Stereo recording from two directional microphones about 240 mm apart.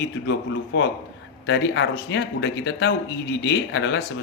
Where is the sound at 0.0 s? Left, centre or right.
Left.